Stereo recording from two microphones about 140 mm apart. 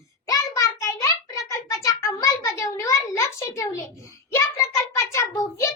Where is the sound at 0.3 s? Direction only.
20° left (ahead or behind).